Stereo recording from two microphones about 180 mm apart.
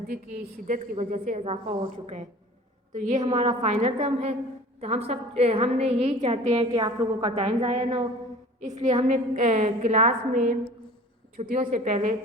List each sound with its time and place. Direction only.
0.1 s a woman's voice: 50° right (ahead or behind)